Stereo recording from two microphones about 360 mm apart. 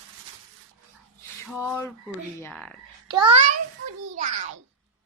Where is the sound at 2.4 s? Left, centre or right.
Centre.